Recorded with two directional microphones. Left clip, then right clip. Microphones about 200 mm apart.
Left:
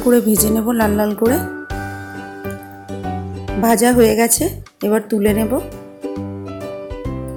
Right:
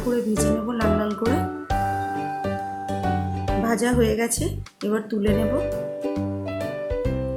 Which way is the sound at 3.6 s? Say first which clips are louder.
Left 10 dB; 35° left (ahead or behind).